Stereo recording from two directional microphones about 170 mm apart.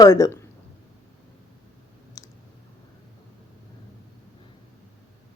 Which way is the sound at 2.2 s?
20° left (ahead or behind).